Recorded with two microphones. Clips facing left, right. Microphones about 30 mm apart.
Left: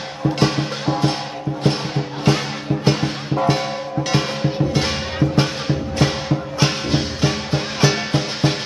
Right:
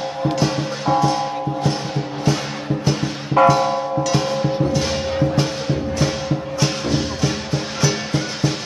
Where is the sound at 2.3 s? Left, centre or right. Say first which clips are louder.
Left 3 dB; left.